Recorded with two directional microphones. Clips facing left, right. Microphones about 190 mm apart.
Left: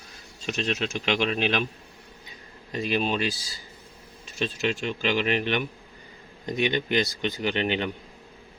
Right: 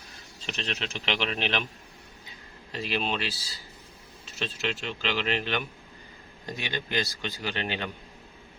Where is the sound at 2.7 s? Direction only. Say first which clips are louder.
Left 4 dB; 15° left (ahead or behind).